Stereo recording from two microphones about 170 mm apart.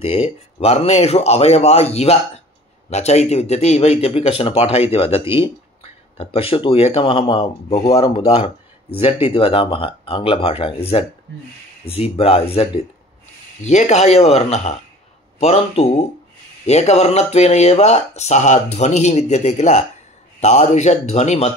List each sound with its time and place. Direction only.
0.0 s speech: 35° left (ahead or behind)
8.9 s speech: 35° left (ahead or behind)